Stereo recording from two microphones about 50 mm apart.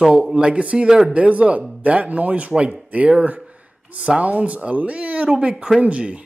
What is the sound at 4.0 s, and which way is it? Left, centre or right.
A man's voice, right.